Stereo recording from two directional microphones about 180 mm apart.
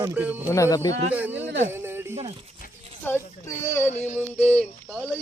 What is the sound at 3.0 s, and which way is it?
Speech, 15° left (ahead or behind).